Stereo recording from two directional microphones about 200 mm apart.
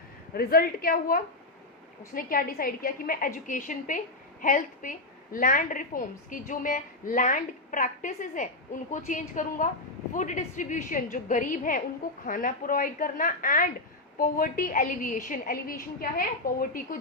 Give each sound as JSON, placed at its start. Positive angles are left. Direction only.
{"t": 0.3, "sound": "a woman's voice", "side_deg": 50}